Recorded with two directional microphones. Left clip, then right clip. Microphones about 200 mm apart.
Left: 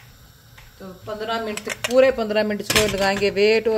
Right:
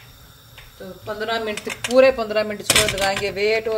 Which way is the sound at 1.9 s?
5° left (ahead or behind).